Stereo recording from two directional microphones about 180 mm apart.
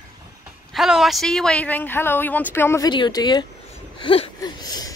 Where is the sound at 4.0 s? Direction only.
30° left (ahead or behind).